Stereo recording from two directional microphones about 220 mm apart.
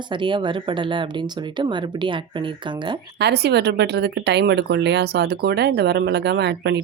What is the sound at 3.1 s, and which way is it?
Speech, 50° right (ahead or behind).